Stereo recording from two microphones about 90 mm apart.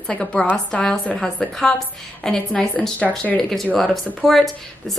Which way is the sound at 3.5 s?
Centre (ahead or behind).